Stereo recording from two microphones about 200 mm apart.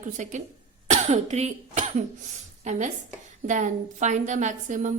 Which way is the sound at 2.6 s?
35° right (ahead or behind).